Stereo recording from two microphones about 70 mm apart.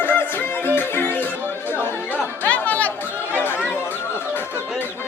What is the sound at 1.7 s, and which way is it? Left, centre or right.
Chatter, left.